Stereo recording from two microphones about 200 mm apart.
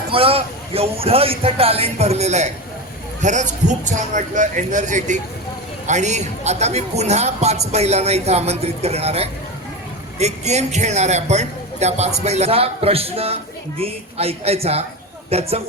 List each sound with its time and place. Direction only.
0.1 s a man's voice: 30° right (ahead or behind)